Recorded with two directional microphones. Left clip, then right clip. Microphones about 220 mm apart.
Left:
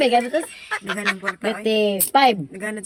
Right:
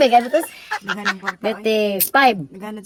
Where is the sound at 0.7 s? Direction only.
30° right (ahead or behind).